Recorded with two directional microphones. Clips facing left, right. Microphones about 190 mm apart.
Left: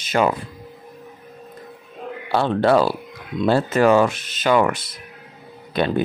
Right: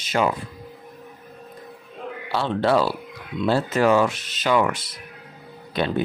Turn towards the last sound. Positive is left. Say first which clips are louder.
# left 3 dB
turn(degrees=55)  # may be behind; listen again after turning